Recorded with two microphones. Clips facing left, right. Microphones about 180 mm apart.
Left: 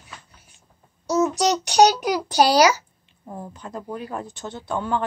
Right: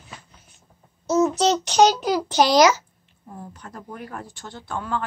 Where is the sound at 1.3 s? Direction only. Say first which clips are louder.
Even; 15° left (ahead or behind).